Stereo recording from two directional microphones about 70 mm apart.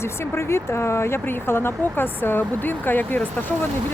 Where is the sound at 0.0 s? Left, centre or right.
Left.